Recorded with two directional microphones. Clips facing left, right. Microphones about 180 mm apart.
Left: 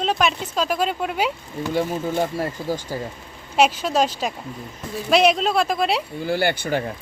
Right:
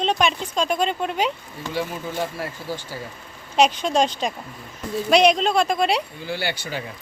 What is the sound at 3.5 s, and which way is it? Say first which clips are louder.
Speech: even; 5° left (ahead or behind).